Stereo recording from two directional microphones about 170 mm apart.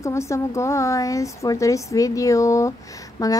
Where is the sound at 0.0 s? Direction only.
15° left (ahead or behind).